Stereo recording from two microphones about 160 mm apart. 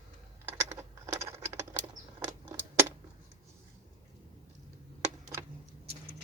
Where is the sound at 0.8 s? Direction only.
20° right (ahead or behind).